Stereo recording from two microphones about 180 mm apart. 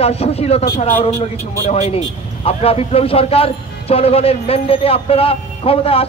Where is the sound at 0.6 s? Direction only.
55° left (ahead or behind).